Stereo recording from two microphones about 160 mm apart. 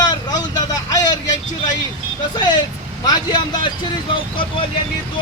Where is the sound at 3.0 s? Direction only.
25° left (ahead or behind).